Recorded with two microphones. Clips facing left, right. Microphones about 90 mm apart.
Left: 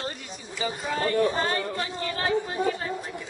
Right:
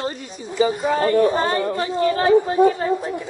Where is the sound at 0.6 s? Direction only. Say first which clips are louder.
Right 10 dB; 40° right (ahead or behind).